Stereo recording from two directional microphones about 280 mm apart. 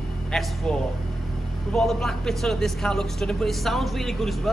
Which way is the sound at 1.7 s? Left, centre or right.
Centre.